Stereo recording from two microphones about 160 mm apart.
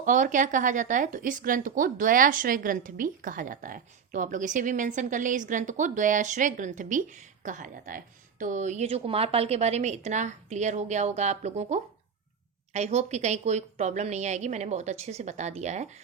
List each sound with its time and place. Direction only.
0.0 s speech: 55° right (ahead or behind)